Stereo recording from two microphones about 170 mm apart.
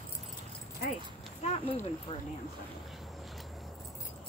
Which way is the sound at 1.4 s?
40° left (ahead or behind).